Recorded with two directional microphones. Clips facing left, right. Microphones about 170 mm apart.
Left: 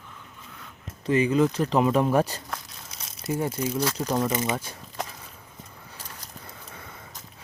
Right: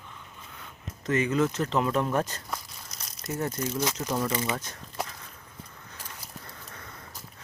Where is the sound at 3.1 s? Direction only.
30° left (ahead or behind).